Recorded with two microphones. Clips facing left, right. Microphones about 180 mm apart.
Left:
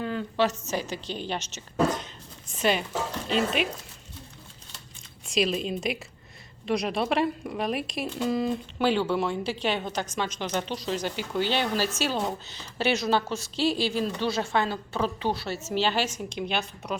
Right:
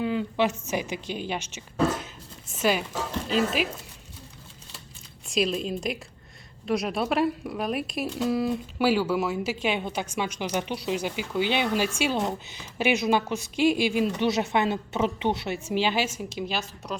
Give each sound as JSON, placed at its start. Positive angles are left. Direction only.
{"t": 0.0, "sound": "a woman's voice", "side_deg": -10}
{"t": 5.3, "sound": "a woman's voice", "side_deg": 0}